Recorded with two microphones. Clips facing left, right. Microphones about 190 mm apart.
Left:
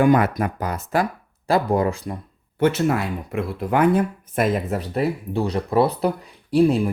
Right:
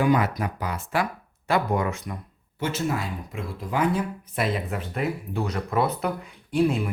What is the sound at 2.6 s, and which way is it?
Speech, 60° left (ahead or behind).